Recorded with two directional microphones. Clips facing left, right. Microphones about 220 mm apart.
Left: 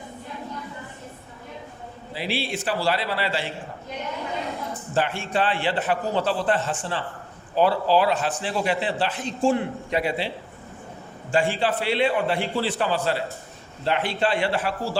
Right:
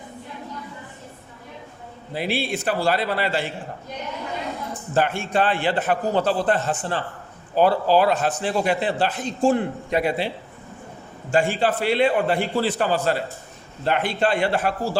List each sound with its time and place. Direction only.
2.1 s a man's voice: 50° right (ahead or behind)
4.9 s a man's voice: 45° right (ahead or behind)